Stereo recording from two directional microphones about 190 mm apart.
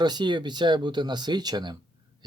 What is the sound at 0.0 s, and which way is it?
Speech, 25° right (ahead or behind).